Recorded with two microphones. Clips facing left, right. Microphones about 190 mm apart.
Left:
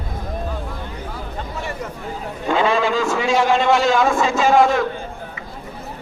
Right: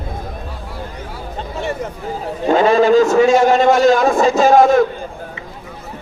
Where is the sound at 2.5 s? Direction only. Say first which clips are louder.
Right 7 dB; 40° right (ahead or behind).